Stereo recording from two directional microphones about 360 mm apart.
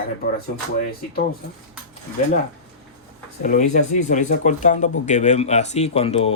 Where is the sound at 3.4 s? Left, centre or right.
Centre.